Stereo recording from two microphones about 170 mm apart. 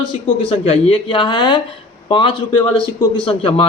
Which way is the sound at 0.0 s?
30° left (ahead or behind).